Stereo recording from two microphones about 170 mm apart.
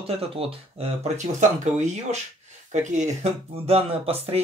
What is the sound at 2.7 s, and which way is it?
Speech, 45° right (ahead or behind).